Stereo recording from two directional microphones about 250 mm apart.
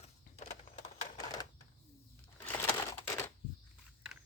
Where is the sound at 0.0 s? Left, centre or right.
Left.